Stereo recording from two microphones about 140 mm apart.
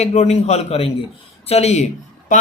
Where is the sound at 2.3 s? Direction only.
65° left (ahead or behind).